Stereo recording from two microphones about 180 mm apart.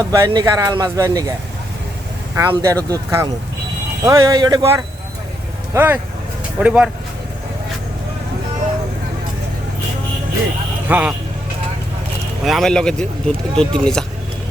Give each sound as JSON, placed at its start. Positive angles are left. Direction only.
{"t": 0.0, "sound": "speech", "side_deg": -20}
{"t": 2.3, "sound": "speech", "side_deg": -15}
{"t": 10.8, "sound": "speech", "side_deg": -10}
{"t": 12.5, "sound": "speech", "side_deg": 0}